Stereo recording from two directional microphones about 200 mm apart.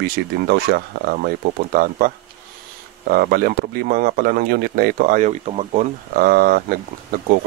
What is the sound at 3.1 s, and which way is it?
Speech, 50° right (ahead or behind).